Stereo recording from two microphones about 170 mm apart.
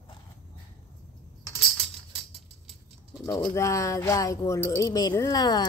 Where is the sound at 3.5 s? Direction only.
20° left (ahead or behind).